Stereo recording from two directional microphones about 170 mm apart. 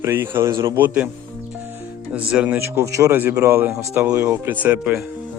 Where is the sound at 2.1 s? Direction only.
5° right (ahead or behind).